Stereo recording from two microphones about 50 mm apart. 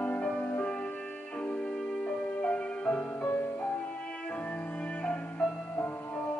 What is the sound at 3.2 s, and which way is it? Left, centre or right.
Music, left.